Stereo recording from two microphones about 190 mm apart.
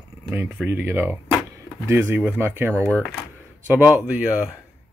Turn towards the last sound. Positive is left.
turn(degrees=-10)  # may be behind; listen again after turning